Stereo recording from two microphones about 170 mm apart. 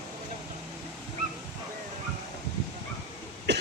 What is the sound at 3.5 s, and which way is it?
Cough, 90° right.